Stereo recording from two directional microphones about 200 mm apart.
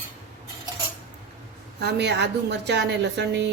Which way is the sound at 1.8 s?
55° right (ahead or behind).